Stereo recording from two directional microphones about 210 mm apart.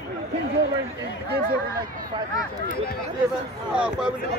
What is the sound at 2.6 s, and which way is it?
Speech, 45° left (ahead or behind).